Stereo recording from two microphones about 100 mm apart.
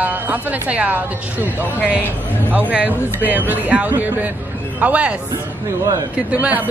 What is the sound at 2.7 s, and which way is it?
Speech, 15° right (ahead or behind).